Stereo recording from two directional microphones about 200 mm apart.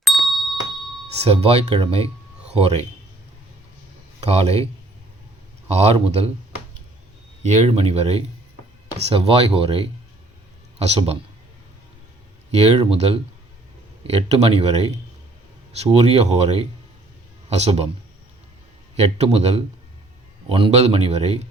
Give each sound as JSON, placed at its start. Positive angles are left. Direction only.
{"t": 0.0, "sound": "ding", "side_deg": 0}
{"t": 1.3, "sound": "speech", "side_deg": -30}
{"t": 4.3, "sound": "speech", "side_deg": -30}
{"t": 5.6, "sound": "speech", "side_deg": -30}
{"t": 7.4, "sound": "a man's voice", "side_deg": -35}
{"t": 12.5, "sound": "speech", "side_deg": -30}
{"t": 18.9, "sound": "speech", "side_deg": -30}